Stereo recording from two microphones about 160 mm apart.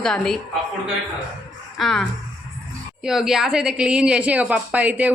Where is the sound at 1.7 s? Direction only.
Centre (ahead or behind).